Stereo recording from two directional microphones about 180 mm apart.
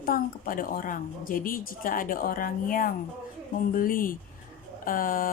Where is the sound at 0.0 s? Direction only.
50° left (ahead or behind).